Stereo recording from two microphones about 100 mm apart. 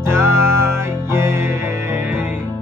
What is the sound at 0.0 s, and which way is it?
Music, 25° right (ahead or behind).